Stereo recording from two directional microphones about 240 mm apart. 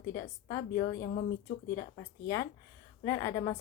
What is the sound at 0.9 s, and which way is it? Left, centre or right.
Speech, left.